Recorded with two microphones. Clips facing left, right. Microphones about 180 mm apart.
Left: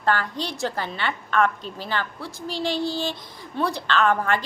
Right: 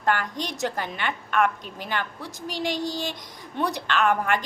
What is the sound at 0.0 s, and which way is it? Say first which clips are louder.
A woman's voice: left 1 dB; 15° right (ahead or behind).